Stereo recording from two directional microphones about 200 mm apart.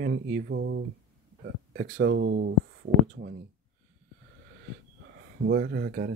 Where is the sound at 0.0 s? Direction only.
55° right (ahead or behind).